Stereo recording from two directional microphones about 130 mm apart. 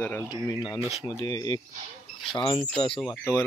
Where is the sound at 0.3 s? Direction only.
35° left (ahead or behind).